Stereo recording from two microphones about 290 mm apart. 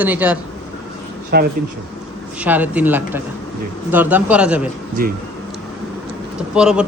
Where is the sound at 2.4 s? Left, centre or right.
Centre.